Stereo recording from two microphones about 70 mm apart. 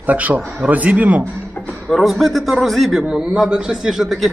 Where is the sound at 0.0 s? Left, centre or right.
Right.